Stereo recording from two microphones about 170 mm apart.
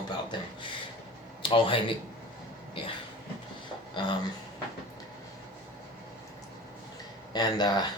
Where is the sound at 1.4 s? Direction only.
30° left (ahead or behind).